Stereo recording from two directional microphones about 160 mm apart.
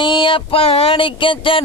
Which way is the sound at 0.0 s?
30° left (ahead or behind).